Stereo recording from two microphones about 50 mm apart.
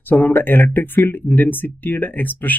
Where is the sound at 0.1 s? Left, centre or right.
Left.